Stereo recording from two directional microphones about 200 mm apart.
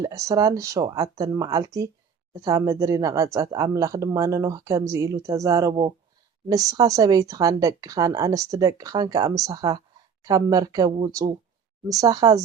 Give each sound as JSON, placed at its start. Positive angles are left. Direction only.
{"t": 0.0, "sound": "speech", "side_deg": -15}